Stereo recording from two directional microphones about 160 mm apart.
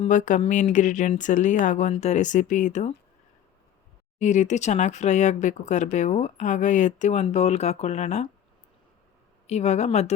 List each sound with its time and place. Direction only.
0.0 s speech: 50° left (ahead or behind)
4.2 s speech: 50° left (ahead or behind)
9.5 s speech: 45° left (ahead or behind)